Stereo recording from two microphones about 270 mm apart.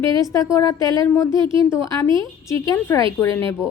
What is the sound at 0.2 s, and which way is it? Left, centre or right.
A woman's voice, centre.